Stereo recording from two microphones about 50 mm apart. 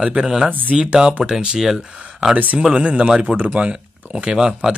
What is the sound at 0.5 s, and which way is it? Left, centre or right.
Speech, right.